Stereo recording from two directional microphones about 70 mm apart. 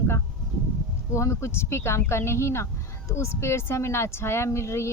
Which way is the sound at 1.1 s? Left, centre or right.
Left.